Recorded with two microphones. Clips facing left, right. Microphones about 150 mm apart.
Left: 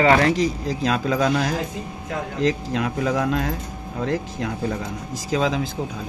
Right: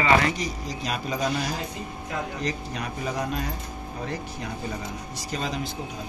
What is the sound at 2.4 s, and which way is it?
Speech, 90° left.